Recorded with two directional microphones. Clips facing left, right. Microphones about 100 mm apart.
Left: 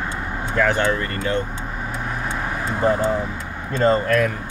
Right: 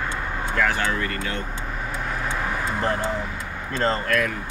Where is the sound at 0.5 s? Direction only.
25° left (ahead or behind).